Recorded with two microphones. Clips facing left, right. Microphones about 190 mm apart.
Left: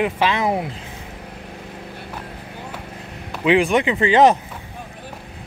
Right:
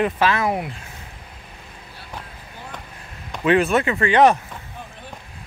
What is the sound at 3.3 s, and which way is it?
Speech, 15° left (ahead or behind).